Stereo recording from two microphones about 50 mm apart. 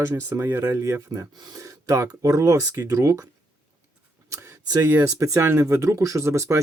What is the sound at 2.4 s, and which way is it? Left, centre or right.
Speech, right.